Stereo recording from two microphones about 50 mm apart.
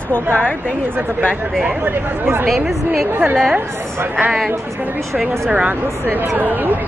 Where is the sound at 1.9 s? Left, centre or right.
Right.